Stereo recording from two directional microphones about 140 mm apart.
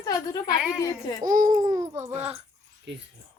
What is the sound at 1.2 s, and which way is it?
Speech, 75° right (ahead or behind).